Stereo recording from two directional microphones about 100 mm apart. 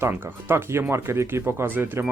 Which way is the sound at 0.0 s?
25° right (ahead or behind).